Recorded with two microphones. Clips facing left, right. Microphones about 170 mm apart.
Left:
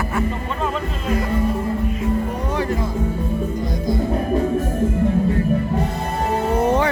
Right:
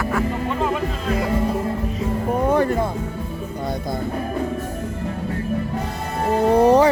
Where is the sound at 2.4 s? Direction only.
55° right (ahead or behind).